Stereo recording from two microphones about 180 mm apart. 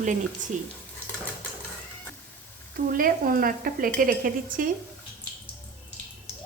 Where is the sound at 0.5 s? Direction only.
45° right (ahead or behind).